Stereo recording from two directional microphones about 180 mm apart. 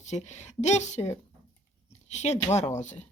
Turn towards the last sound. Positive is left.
turn(degrees=40)  # may be behind; listen again after turning